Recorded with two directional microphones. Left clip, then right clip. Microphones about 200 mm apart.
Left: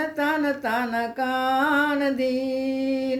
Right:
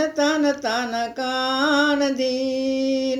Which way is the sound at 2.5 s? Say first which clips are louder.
Right 3 dB; 5° left (ahead or behind).